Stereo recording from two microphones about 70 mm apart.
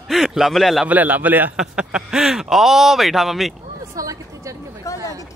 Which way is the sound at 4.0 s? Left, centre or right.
Right.